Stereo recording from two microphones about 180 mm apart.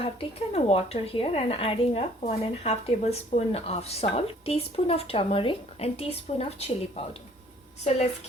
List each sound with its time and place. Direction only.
0.0 s a woman's voice: 30° left (ahead or behind)